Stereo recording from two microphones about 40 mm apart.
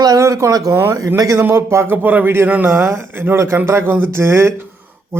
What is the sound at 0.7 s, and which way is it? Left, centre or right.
A man's voice, right.